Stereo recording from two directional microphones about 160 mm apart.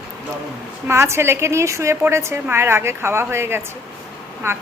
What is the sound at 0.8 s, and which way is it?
A woman's voice, 15° right (ahead or behind).